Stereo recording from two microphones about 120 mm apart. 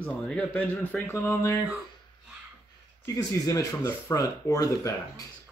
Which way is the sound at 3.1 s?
25° left (ahead or behind).